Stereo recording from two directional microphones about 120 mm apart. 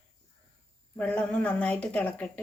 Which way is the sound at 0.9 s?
10° left (ahead or behind).